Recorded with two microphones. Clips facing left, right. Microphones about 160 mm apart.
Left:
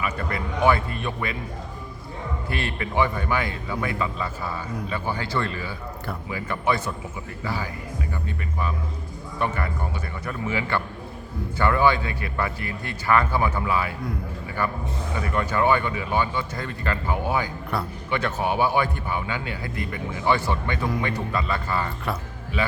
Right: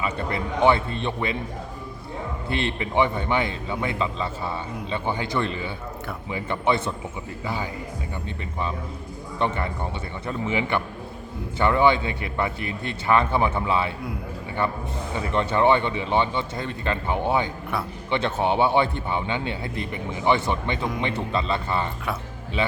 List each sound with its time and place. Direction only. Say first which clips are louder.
0.0 s a man's voice: right 1 dB; 25° right (ahead or behind)
2.5 s a man's voice: right 4 dB; 25° right (ahead or behind)
9.4 s a man's voice: right 1 dB; 25° right (ahead or behind)
15.1 s a man's voice: right 2 dB; 25° right (ahead or behind)